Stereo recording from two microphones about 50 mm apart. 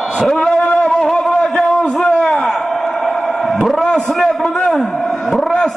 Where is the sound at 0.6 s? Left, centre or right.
Left.